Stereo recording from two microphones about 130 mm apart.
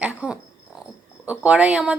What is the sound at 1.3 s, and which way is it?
Speech, 10° right (ahead or behind).